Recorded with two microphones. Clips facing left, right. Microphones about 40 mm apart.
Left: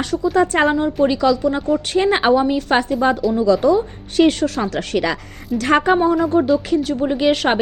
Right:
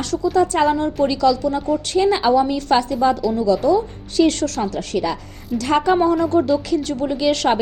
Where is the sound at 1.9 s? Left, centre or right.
Left.